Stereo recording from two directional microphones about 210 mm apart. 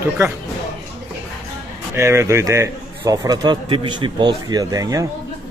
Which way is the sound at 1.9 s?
10° right (ahead or behind).